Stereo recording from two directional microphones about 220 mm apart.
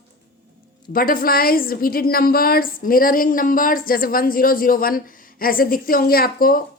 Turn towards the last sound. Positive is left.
turn(degrees=40)  # may be behind; listen again after turning